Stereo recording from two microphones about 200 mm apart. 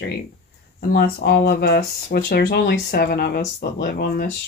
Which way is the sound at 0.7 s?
50° left (ahead or behind).